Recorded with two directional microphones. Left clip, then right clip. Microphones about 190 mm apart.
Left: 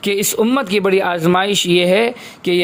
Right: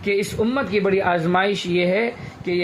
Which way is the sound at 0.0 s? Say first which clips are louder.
Left 5 dB; 50° left (ahead or behind).